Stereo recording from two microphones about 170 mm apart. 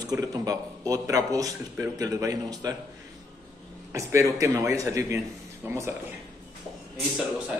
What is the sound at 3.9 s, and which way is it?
A man's voice, 20° right (ahead or behind).